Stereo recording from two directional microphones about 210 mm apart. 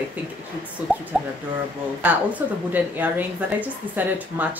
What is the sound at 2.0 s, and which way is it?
A woman's voice, 5° right (ahead or behind).